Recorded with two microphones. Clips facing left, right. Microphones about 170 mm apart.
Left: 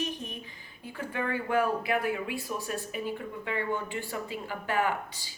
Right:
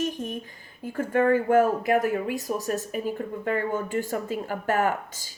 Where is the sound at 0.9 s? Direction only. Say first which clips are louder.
Right 11 dB; 45° right (ahead or behind).